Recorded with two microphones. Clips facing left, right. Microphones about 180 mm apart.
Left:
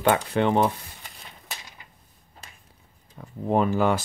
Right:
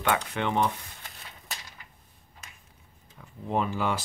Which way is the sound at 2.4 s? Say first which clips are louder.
Left 2 dB; 30° left (ahead or behind).